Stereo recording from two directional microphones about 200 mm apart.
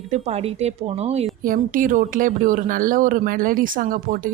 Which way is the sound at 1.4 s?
45° right (ahead or behind).